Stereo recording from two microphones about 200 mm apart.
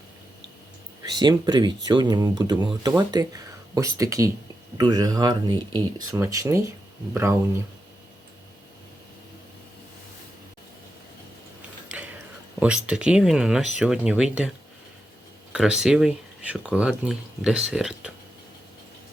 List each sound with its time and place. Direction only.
1.0 s speech: 20° right (ahead or behind)
11.9 s gears: 5° right (ahead or behind)
12.5 s speech: 5° right (ahead or behind)
15.5 s speech: 5° right (ahead or behind)